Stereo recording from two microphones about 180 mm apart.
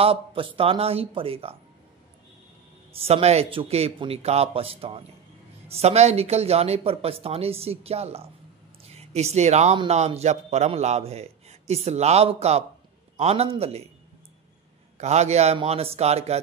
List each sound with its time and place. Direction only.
0.0 s a man's voice: 30° right (ahead or behind)
2.9 s a man's voice: 35° right (ahead or behind)
15.0 s a man's voice: 40° right (ahead or behind)